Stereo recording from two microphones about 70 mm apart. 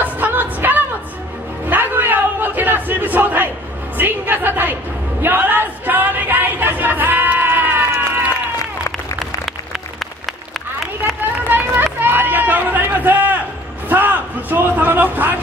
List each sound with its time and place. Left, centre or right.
0.0 s music: right
1.7 s battle cry: right
4.0 s a sound: right
9.2 s applause: centre
11.4 s run: right
13.8 s a sound: right